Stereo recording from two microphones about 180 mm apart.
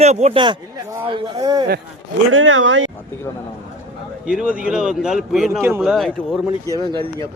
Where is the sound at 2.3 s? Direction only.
90° right.